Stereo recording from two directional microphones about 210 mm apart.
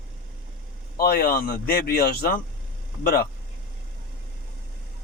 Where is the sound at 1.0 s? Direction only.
50° left (ahead or behind).